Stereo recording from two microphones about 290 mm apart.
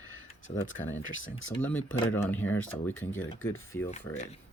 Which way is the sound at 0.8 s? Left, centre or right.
Left.